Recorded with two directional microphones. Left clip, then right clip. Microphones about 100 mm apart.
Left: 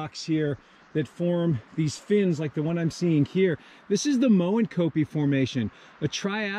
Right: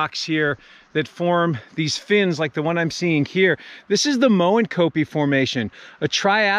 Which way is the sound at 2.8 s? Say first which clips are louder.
Right 4 dB; 25° left (ahead or behind).